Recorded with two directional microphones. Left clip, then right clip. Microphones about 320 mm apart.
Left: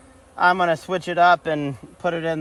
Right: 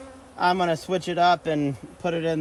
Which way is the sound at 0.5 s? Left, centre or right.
Centre.